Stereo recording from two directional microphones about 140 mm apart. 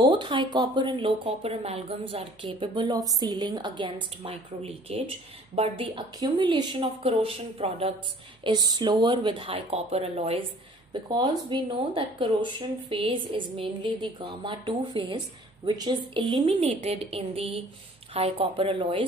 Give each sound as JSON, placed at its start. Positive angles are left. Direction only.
{"t": 0.0, "sound": "speech", "side_deg": -35}
{"t": 8.5, "sound": "speech", "side_deg": -30}
{"t": 10.9, "sound": "speech", "side_deg": -30}
{"t": 16.5, "sound": "speech", "side_deg": -50}